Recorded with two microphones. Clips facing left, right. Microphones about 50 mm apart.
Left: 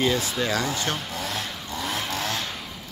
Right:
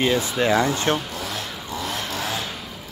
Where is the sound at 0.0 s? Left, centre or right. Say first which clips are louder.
Right 3 dB; centre.